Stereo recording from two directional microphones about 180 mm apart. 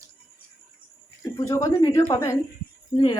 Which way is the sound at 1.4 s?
20° left (ahead or behind).